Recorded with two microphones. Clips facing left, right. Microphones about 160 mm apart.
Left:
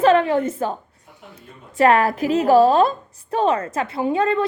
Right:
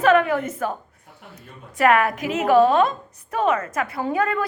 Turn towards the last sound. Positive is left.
turn(degrees=25)  # may be behind; listen again after turning